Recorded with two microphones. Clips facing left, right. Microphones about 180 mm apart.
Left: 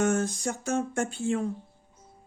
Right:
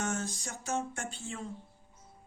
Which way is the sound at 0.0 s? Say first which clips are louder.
Left 10 dB; 55° left (ahead or behind).